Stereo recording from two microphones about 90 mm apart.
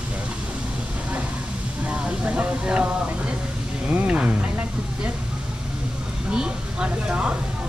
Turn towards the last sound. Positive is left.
turn(degrees=-10)  # may be behind; listen again after turning